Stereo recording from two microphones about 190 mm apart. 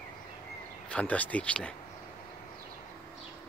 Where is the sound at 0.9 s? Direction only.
5° left (ahead or behind).